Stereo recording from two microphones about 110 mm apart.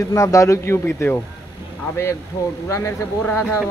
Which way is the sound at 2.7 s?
30° left (ahead or behind).